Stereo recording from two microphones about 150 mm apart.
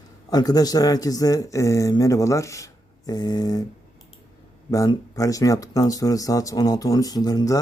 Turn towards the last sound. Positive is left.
turn(degrees=25)  # may be behind; listen again after turning